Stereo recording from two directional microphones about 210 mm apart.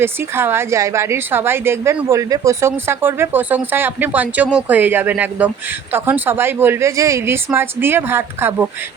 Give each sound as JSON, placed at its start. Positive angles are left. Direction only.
{"t": 0.0, "sound": "a woman's voice", "side_deg": -10}